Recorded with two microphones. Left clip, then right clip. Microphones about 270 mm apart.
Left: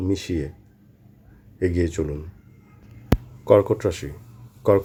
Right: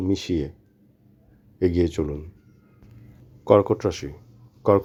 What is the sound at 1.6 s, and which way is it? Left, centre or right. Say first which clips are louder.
Speech: right 1 dB; centre.